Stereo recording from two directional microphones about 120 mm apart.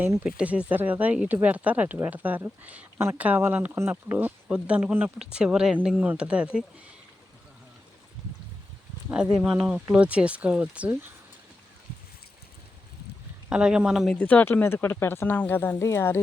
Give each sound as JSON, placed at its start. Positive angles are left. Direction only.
{"t": 0.0, "sound": "speech", "side_deg": -15}
{"t": 4.4, "sound": "speech", "side_deg": -10}
{"t": 9.0, "sound": "speech", "side_deg": -10}
{"t": 13.5, "sound": "speech", "side_deg": -5}
{"t": 14.1, "sound": "speech", "side_deg": 15}